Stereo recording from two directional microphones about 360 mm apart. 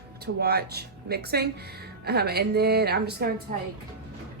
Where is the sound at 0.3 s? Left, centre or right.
Right.